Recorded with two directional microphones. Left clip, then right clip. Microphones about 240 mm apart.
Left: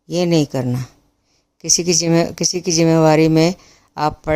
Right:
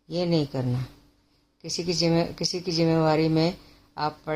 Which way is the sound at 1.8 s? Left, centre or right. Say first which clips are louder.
Left 6 dB; left.